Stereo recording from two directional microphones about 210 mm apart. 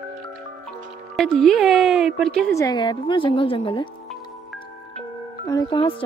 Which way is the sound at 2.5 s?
20° left (ahead or behind).